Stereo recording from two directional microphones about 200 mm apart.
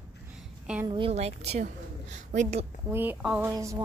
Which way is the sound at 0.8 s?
25° right (ahead or behind).